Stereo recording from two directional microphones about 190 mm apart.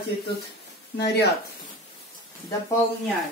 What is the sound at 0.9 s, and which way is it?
Speech, 60° left (ahead or behind).